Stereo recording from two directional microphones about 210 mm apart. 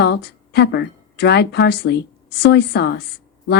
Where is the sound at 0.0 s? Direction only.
55° left (ahead or behind).